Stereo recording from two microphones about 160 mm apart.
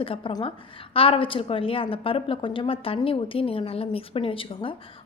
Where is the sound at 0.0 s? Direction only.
35° left (ahead or behind).